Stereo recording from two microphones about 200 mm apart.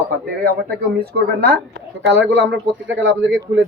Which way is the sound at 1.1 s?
55° right (ahead or behind).